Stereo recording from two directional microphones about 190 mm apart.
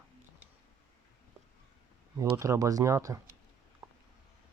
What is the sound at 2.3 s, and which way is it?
Speech, 15° right (ahead or behind).